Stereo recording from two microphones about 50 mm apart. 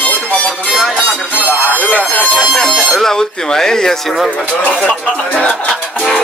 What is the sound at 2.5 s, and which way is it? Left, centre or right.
Speech, centre.